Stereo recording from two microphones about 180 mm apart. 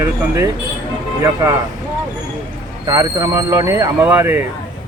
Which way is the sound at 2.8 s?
20° right (ahead or behind).